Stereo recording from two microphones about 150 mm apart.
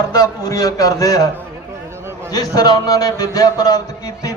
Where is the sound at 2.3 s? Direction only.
25° left (ahead or behind).